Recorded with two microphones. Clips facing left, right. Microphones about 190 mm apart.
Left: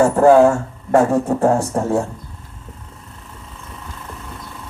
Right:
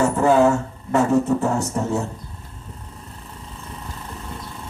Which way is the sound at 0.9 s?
55° left (ahead or behind).